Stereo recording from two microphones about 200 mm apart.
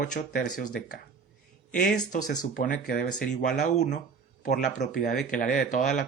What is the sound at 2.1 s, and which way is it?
Speech, 40° left (ahead or behind).